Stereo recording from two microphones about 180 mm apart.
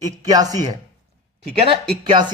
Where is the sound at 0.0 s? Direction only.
20° right (ahead or behind).